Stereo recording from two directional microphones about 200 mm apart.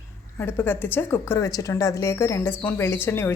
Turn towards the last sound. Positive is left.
turn(degrees=10)  # may be behind; listen again after turning